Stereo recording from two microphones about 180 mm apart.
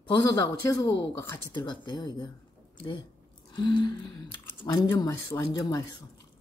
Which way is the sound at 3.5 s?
25° left (ahead or behind).